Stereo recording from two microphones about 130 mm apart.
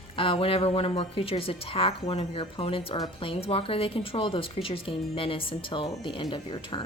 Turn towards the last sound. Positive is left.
turn(degrees=40)  # may be behind; listen again after turning